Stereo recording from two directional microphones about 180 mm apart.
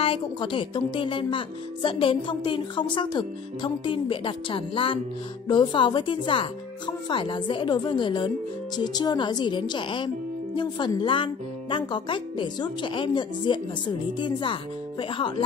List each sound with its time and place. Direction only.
0.0 s speech: 30° left (ahead or behind)